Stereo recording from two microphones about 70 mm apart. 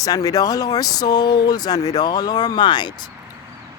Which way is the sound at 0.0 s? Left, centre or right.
Left.